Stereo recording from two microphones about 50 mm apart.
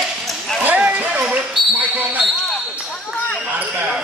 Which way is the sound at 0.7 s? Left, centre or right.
Right.